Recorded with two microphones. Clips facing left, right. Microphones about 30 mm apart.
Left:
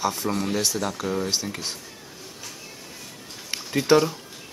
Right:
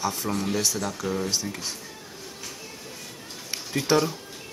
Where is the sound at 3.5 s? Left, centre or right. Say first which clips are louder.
Left 4 dB; centre.